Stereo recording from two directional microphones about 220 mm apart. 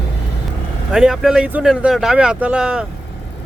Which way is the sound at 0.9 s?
Centre (ahead or behind).